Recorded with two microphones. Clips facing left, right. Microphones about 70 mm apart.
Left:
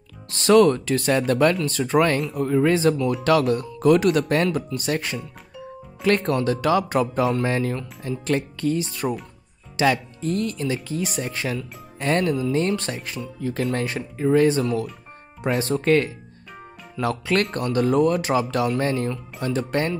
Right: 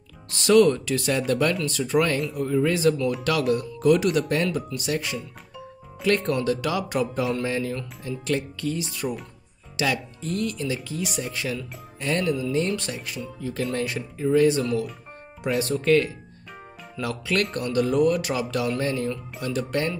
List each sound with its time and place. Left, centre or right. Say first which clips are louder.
0.3 s speech: left 2 dB; left
3.3 s speech: left 6 dB; left
9.0 s speech: left 3 dB; left
9.8 s speech: left 5 dB; left